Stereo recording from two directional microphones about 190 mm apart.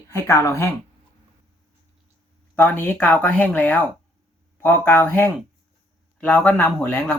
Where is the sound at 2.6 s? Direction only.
10° left (ahead or behind).